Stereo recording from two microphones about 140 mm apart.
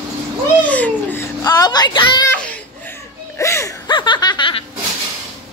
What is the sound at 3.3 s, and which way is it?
Music, 20° left (ahead or behind).